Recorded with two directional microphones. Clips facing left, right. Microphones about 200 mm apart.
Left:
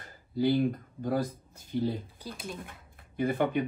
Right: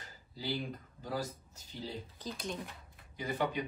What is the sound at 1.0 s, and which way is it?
Speech, 55° left (ahead or behind).